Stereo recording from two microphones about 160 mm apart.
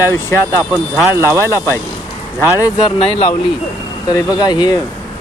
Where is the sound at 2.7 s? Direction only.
35° left (ahead or behind).